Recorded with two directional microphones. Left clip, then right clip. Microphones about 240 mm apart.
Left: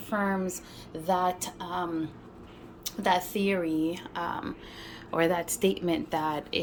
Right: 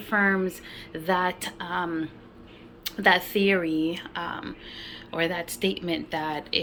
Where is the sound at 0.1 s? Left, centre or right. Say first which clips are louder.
Right 6 dB; centre.